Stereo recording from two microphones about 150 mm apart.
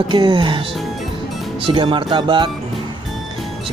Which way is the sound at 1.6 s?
35° right (ahead or behind).